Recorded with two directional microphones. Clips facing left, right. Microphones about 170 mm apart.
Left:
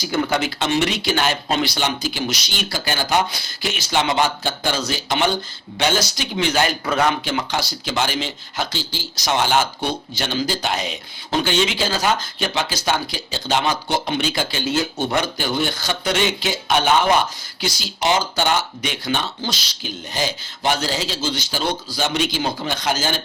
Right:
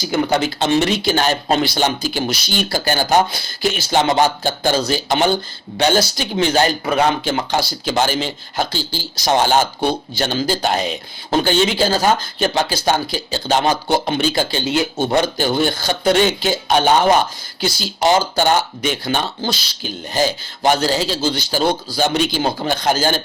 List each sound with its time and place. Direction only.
0.0 s speech: 25° right (ahead or behind)
6.8 s speech: 20° right (ahead or behind)
14.7 s speech: 20° right (ahead or behind)
15.1 s speech: 35° right (ahead or behind)